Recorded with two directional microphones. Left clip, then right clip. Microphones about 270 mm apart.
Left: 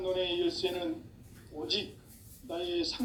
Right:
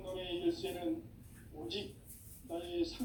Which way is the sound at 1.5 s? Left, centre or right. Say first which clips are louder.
Left 7 dB; left.